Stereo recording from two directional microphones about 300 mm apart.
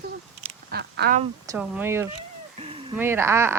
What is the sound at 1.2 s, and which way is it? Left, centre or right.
Speech, centre.